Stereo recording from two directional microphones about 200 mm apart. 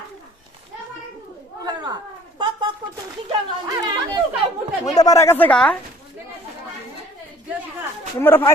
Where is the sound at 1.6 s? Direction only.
20° right (ahead or behind).